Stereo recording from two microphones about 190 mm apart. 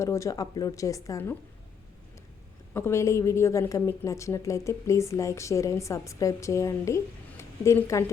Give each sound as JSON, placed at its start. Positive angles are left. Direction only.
{"t": 0.0, "sound": "a woman's voice", "side_deg": 15}
{"t": 2.7, "sound": "a woman's voice", "side_deg": 15}